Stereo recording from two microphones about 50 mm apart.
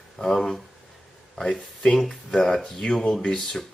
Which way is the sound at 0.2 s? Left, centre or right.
Centre.